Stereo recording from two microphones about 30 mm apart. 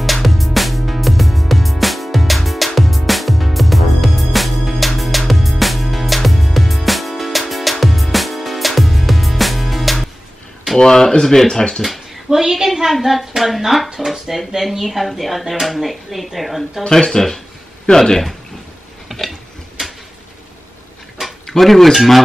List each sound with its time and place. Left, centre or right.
0.0 s music: centre
10.8 s speech: centre
12.3 s a woman's voice: centre
16.9 s speech: centre
19.1 s tick-tock: centre
19.8 s a sound: centre
21.2 s a sound: centre
21.5 s speech: centre